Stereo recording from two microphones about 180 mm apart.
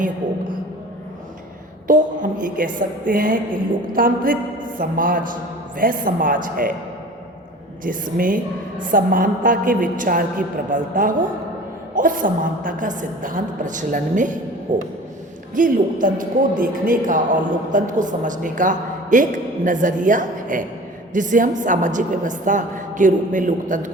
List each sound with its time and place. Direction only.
1.9 s a woman's voice: 50° right (ahead or behind)
7.9 s a woman's voice: 50° right (ahead or behind)